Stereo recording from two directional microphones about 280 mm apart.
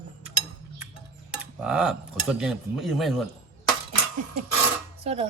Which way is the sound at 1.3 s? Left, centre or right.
Centre.